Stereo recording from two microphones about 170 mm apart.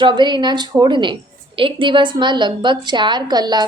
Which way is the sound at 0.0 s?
25° right (ahead or behind).